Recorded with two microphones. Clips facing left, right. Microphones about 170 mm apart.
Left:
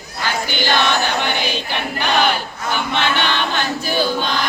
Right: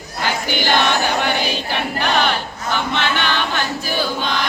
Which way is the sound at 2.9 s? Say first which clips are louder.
Left 3 dB; 15° left (ahead or behind).